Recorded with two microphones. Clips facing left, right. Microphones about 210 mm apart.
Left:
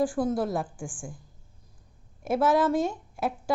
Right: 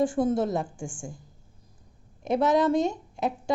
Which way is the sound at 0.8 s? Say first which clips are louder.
Right 2 dB; 25° right (ahead or behind).